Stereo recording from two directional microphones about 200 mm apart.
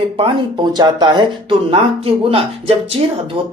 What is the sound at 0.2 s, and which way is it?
Speech, 20° right (ahead or behind).